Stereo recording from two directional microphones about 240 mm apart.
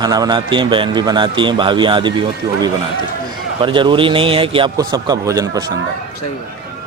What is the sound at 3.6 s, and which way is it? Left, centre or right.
Speech, centre.